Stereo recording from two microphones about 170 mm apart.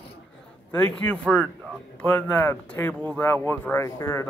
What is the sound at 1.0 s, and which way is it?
A man's voice, 5° left (ahead or behind).